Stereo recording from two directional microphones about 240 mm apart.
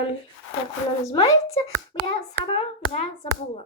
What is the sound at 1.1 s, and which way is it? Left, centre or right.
A child's voice, left.